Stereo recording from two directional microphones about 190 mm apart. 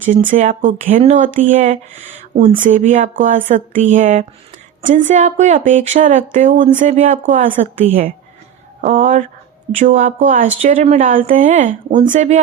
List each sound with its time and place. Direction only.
0.3 s speech: 40° right (ahead or behind)